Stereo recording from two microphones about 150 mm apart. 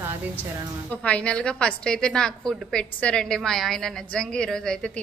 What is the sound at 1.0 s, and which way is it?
A woman's voice, 10° left (ahead or behind).